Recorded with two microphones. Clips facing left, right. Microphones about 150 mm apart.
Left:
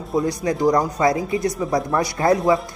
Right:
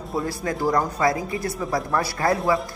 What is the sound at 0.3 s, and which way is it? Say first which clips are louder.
Speech: left 4 dB; 20° left (ahead or behind).